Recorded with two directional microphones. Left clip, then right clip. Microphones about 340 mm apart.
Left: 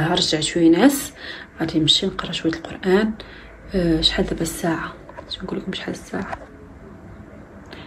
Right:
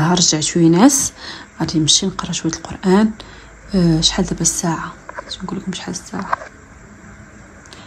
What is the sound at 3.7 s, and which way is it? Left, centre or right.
A woman's voice, centre.